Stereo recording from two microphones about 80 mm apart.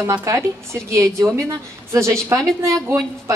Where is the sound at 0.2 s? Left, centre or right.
Right.